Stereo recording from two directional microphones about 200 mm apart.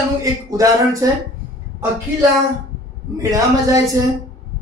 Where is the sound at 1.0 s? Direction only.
15° right (ahead or behind).